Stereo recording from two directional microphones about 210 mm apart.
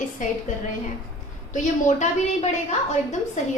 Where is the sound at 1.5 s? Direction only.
35° left (ahead or behind).